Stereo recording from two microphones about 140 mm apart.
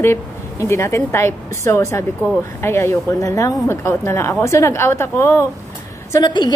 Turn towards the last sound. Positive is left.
turn(degrees=30)  # may be behind; listen again after turning